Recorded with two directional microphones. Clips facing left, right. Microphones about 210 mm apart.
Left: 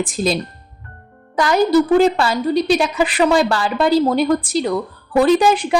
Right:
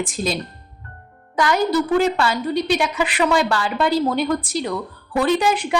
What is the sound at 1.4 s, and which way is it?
A woman's voice, 35° left (ahead or behind).